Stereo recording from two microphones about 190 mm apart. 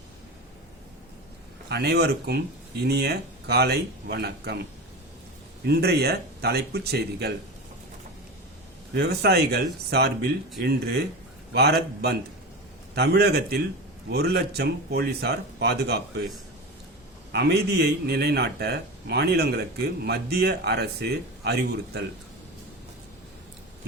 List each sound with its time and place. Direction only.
1.7 s a man's voice: 60° right (ahead or behind)
5.6 s a man's voice: 60° right (ahead or behind)
9.0 s a man's voice: 55° right (ahead or behind)
17.3 s a man's voice: 60° right (ahead or behind)